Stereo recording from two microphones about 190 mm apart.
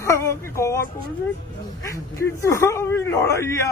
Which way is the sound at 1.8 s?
15° left (ahead or behind).